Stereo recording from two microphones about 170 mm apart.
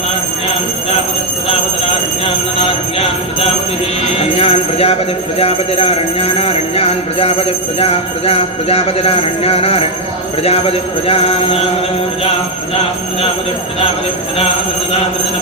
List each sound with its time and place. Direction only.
4.2 s speech: 35° left (ahead or behind)